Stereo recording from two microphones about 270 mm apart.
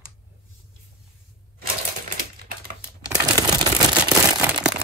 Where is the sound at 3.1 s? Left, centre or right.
Centre.